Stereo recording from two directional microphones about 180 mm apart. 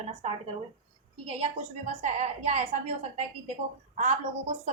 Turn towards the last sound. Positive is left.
turn(degrees=-40)  # may be behind; listen again after turning